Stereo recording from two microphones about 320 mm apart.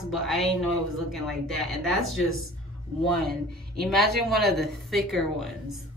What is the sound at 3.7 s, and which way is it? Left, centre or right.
Speech, centre.